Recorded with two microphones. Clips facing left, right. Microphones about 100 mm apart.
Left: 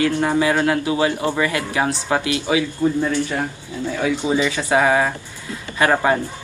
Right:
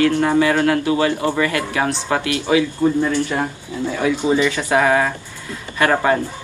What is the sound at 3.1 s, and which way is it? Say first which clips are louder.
Speech: right 2 dB; 20° right (ahead or behind).